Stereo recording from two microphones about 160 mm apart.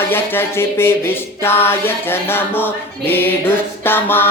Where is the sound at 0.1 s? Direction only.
15° left (ahead or behind).